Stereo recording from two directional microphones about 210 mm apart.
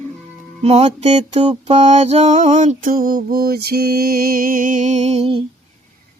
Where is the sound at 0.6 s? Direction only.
30° right (ahead or behind).